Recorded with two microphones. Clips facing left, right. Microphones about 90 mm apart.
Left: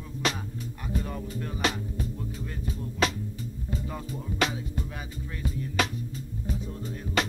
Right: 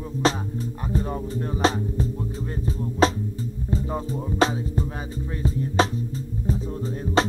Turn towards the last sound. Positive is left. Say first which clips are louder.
# right 7 dB
turn(degrees=-35)  # may be behind; listen again after turning